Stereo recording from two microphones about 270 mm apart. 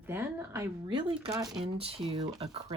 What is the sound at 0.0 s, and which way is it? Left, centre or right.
Speech, centre.